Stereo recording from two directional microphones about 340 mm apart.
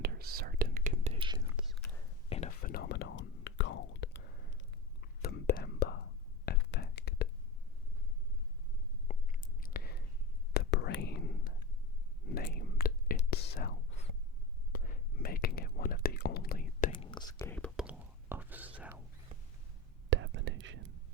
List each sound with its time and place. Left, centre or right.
0.0 s whispering: right
1.5 s whispering: centre
2.3 s whispering: centre
9.0 s chewing: left
10.5 s whispering: left
16.9 s whispering: centre
20.1 s whispering: right